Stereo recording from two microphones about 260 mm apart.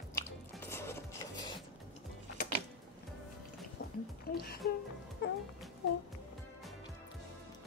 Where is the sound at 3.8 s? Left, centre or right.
Left.